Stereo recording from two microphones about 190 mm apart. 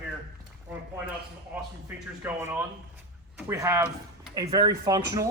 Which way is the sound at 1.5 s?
10° right (ahead or behind).